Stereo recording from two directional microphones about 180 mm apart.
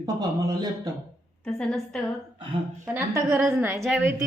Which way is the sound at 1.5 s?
5° left (ahead or behind).